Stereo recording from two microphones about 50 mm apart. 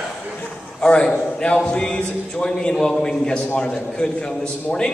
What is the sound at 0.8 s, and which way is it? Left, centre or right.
Speech, centre.